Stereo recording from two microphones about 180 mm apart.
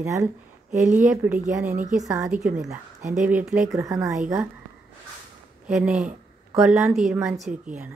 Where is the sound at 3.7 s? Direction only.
20° right (ahead or behind).